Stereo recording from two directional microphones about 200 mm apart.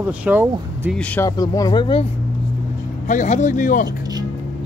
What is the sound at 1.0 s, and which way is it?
Speech, 5° left (ahead or behind).